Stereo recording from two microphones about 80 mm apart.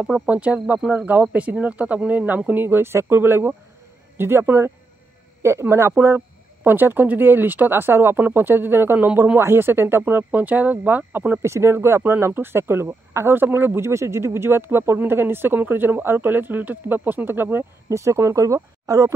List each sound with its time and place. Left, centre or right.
0.3 s speech: centre
11.4 s speech: right
17.8 s speech: right